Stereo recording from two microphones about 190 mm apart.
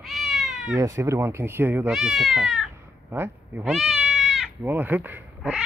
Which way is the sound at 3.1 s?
10° right (ahead or behind).